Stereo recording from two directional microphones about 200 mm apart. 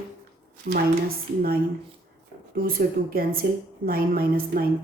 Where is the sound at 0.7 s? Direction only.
50° right (ahead or behind).